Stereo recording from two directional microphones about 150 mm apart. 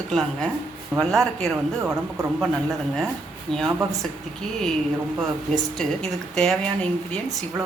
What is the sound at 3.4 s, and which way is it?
Speech, 5° left (ahead or behind).